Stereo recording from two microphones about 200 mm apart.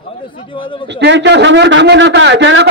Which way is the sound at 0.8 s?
60° right (ahead or behind).